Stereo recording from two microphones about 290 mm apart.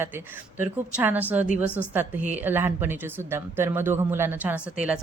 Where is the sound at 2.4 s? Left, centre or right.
Centre.